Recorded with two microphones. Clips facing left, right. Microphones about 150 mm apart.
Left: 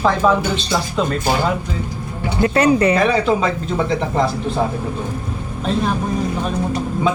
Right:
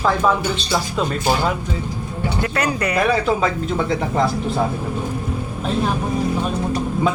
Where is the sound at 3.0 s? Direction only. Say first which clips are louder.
Left 2 dB; centre (ahead or behind).